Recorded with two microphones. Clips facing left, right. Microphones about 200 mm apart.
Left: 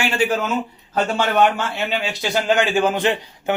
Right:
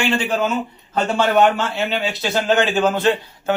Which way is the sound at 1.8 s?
15° left (ahead or behind).